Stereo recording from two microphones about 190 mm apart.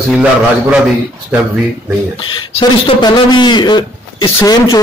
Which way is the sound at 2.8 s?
25° left (ahead or behind).